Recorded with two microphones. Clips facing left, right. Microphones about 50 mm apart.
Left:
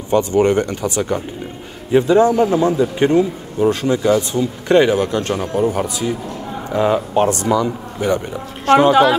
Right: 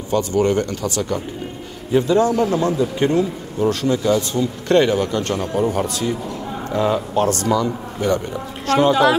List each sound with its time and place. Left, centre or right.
0.1 s a man's voice: left; by 6.6 s centre
6.7 s speech: centre